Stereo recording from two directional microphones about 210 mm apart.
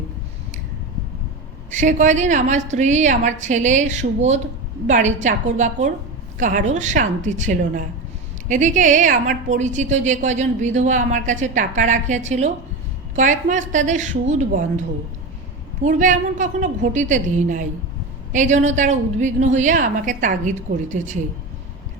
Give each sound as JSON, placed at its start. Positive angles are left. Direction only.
{"t": 1.7, "sound": "a woman's voice", "side_deg": -35}